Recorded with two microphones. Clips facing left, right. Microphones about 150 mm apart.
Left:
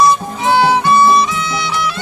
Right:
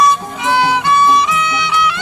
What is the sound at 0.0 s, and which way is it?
Music, 30° left (ahead or behind).